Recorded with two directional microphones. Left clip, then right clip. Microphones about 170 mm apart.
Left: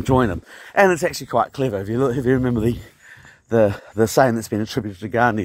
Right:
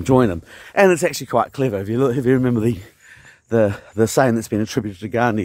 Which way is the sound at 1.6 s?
30° right (ahead or behind).